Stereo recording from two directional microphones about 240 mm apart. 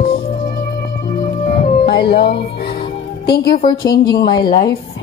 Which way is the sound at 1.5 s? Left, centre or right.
Left.